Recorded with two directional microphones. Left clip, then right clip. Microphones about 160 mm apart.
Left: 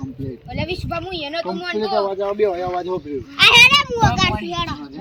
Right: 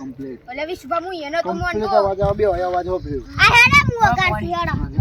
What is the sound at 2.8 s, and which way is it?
Speech, 15° right (ahead or behind).